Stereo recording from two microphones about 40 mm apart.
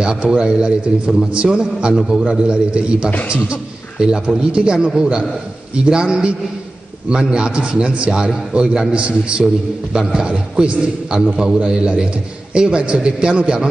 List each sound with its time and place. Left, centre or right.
0.0 s a man's voice: right
0.7 s a man's voice: right
8.1 s a man's voice: centre
8.5 s a man's voice: right